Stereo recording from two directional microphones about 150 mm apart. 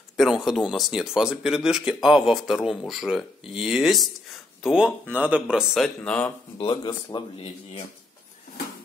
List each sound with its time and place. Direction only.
0.2 s speech: centre (ahead or behind)
6.0 s speech: 5° left (ahead or behind)
6.6 s speech: 30° left (ahead or behind)